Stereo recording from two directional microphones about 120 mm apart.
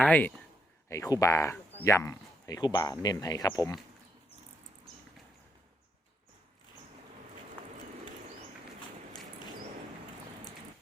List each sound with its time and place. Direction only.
0.0 s a man's voice: 10° left (ahead or behind)
0.9 s speech: 25° left (ahead or behind)